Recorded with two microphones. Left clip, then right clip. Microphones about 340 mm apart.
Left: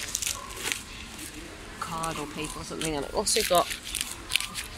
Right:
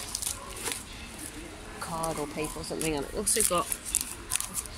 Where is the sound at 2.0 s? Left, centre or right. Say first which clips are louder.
Right 3 dB; centre.